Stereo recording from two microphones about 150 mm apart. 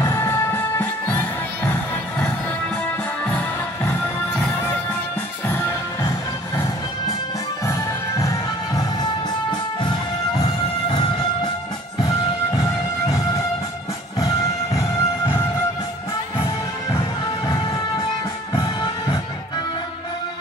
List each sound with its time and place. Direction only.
0.0 s music: 20° left (ahead or behind)
3.3 s music: 10° left (ahead or behind)
5.5 s music: 15° left (ahead or behind)
8.2 s music: 20° left (ahead or behind)
14.2 s music: 20° left (ahead or behind)
18.5 s music: 30° left (ahead or behind)